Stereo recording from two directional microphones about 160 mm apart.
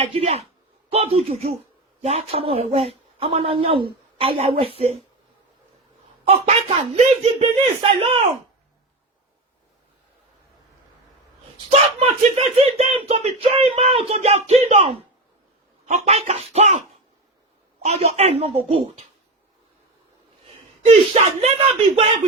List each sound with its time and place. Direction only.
0.0 s speech: 35° right (ahead or behind)
6.2 s speech: 40° right (ahead or behind)
11.7 s speech: 40° right (ahead or behind)
17.8 s speech: 40° right (ahead or behind)
20.8 s speech: 40° right (ahead or behind)